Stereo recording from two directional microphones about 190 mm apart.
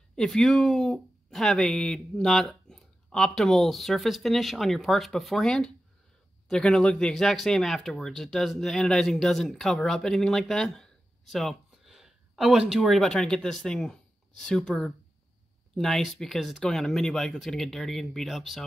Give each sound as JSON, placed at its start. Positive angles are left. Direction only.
{"t": 0.1, "sound": "speech", "side_deg": 0}